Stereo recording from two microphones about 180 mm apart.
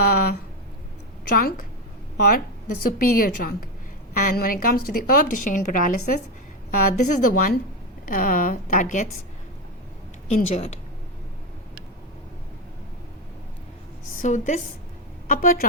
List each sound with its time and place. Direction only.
0.0 s speech: 55° left (ahead or behind)
1.4 s a woman's voice: 55° left (ahead or behind)
3.0 s a woman's voice: 50° left (ahead or behind)
10.2 s a woman's voice: 40° left (ahead or behind)
14.2 s a woman's voice: 45° left (ahead or behind)